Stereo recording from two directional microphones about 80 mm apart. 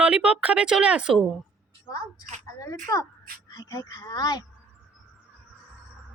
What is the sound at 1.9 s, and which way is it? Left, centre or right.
Speech, left.